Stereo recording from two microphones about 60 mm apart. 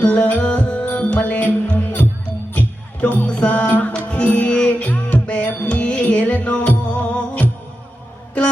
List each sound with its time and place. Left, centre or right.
0.0 s music: left